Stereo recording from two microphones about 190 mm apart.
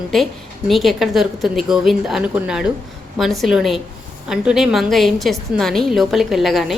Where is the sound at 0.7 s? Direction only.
Centre (ahead or behind).